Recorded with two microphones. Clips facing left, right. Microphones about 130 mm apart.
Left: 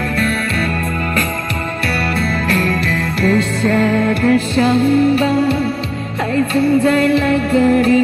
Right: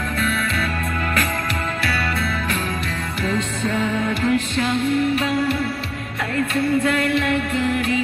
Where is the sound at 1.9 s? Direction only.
60° left (ahead or behind); by 3.3 s 90° left.